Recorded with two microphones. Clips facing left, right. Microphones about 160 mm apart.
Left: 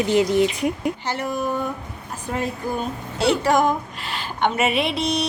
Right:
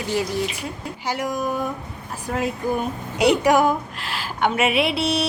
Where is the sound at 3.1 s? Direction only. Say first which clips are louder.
Right 2 dB; 15° right (ahead or behind).